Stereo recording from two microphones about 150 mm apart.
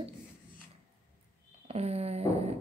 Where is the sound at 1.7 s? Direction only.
45° right (ahead or behind).